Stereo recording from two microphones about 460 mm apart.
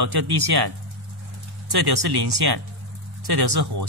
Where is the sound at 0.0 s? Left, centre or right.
Right.